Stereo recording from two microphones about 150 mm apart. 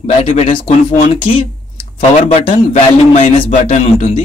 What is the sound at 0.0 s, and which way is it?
Speech, 50° left (ahead or behind).